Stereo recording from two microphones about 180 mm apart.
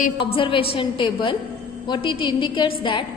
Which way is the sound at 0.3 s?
30° left (ahead or behind).